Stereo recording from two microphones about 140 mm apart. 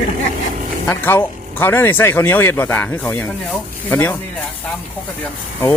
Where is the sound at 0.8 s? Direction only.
15° left (ahead or behind).